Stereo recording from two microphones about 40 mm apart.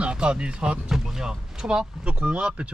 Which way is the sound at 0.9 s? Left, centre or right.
Centre.